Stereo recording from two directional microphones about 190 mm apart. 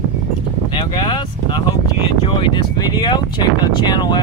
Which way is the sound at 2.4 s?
25° left (ahead or behind).